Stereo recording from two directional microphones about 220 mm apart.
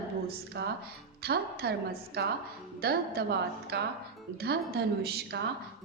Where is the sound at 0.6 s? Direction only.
45° right (ahead or behind).